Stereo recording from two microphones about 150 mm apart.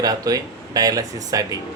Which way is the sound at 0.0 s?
25° right (ahead or behind).